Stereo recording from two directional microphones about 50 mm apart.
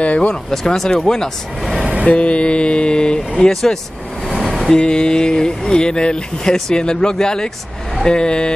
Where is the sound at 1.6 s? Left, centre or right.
Centre.